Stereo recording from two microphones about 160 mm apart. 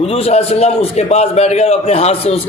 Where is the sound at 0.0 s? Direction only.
40° left (ahead or behind).